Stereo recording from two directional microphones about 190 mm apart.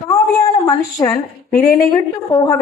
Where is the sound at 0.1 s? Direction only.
20° left (ahead or behind).